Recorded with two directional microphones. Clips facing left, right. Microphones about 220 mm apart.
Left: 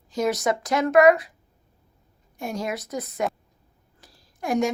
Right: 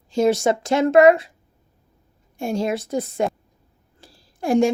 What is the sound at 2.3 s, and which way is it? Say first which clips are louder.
A woman's voice: right 6 dB; 30° right (ahead or behind).